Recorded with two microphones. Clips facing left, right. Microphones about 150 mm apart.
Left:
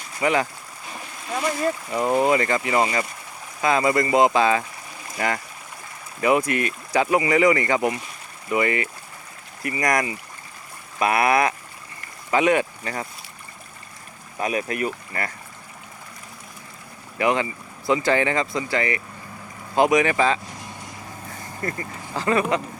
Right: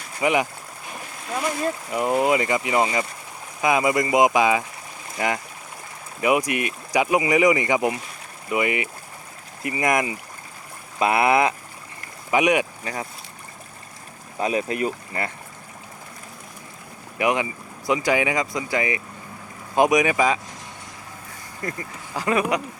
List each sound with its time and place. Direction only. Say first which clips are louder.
0.2 s speech: even; 15° right (ahead or behind)
1.9 s speech: even; 5° right (ahead or behind)
14.3 s speech: right 1 dB; 25° right (ahead or behind)
17.2 s speech: left 1 dB; 15° right (ahead or behind)
21.6 s speech: left 1 dB; 10° right (ahead or behind)